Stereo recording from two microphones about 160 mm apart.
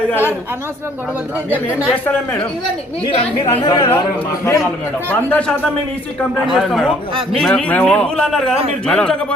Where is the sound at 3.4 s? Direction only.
25° left (ahead or behind).